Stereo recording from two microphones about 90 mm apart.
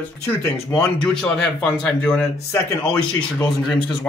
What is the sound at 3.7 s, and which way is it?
Speech, 5° left (ahead or behind).